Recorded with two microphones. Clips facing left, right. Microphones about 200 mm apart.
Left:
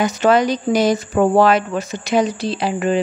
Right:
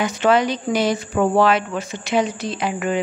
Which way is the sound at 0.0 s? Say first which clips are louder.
Left 2 dB; 40° left (ahead or behind).